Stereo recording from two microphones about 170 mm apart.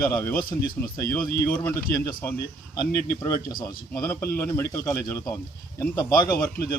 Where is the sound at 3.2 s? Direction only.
20° left (ahead or behind).